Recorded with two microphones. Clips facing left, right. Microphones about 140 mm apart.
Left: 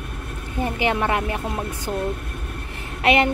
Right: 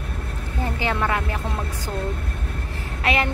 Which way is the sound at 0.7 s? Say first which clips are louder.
Left 2 dB; 20° left (ahead or behind).